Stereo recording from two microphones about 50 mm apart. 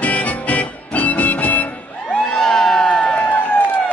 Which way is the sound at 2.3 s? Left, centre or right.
Centre.